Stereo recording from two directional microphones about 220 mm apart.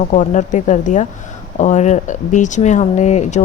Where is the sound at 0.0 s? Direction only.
35° left (ahead or behind).